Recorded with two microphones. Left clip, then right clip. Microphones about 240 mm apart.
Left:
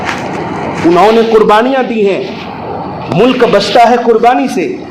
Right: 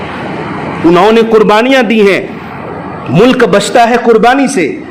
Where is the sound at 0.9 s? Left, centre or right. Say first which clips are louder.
Even; right.